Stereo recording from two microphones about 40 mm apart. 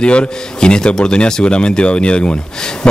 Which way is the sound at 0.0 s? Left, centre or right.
Left.